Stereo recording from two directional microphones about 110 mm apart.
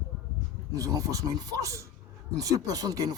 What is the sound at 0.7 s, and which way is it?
Speech, 35° right (ahead or behind).